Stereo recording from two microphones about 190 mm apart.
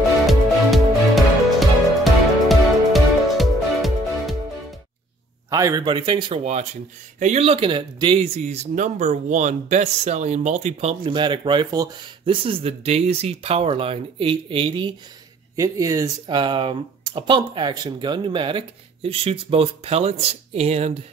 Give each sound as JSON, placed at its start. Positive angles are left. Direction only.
{"t": 0.3, "sound": "music", "side_deg": 0}
{"t": 5.5, "sound": "speech", "side_deg": -20}